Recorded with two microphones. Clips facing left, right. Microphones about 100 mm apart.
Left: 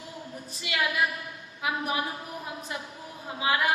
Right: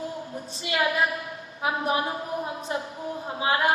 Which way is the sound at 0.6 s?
30° right (ahead or behind).